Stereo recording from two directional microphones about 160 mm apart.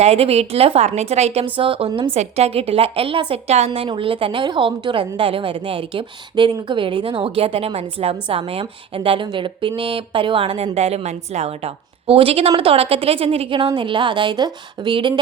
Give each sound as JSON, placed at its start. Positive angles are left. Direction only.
{"t": 0.0, "sound": "a woman's voice", "side_deg": -40}
{"t": 3.7, "sound": "a woman's voice", "side_deg": -30}